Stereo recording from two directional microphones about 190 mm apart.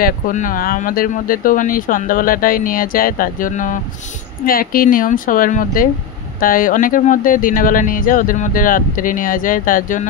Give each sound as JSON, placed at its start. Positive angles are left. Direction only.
{"t": 0.0, "sound": "speech", "side_deg": 45}